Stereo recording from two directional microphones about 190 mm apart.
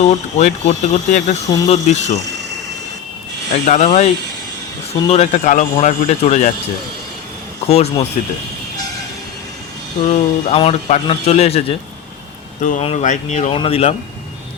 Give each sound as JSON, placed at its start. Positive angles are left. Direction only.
{"t": 0.0, "sound": "speech", "side_deg": 35}
{"t": 3.5, "sound": "speech", "side_deg": 40}
{"t": 7.7, "sound": "speech", "side_deg": 35}
{"t": 10.0, "sound": "speech", "side_deg": 40}